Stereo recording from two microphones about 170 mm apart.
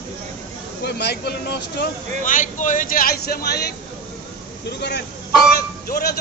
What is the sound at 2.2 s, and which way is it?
Speech, 50° left (ahead or behind).